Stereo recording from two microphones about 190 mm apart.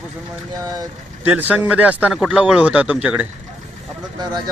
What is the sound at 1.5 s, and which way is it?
Speech, 5° right (ahead or behind).